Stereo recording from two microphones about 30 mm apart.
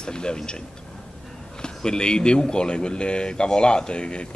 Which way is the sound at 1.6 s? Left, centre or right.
Left.